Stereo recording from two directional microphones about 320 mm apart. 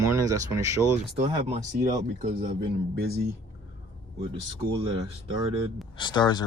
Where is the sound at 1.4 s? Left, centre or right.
Right.